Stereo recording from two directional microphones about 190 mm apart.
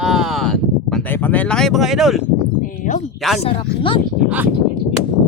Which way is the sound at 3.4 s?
25° left (ahead or behind).